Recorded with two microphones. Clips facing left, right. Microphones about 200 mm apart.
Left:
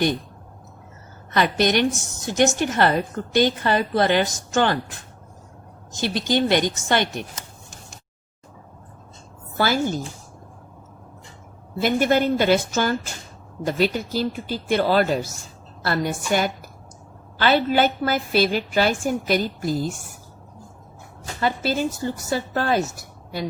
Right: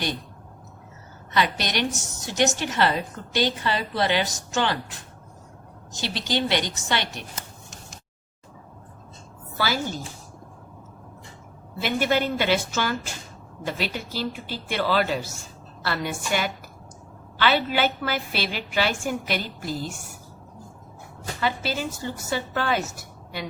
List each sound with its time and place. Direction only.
1.3 s a woman's voice: 50° left (ahead or behind)
6.0 s a woman's voice: 50° left (ahead or behind)
9.6 s speech: 45° left (ahead or behind)
11.8 s a woman's voice: 45° left (ahead or behind)
21.4 s a woman's voice: 45° left (ahead or behind)